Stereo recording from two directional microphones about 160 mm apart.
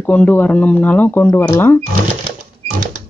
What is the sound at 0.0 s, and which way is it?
Speech, 10° left (ahead or behind).